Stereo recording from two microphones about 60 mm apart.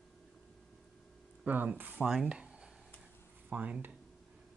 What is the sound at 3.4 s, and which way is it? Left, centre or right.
Speech, right.